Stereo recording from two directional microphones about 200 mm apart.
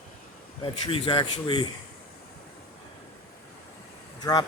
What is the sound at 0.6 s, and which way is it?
A man's voice, 25° left (ahead or behind).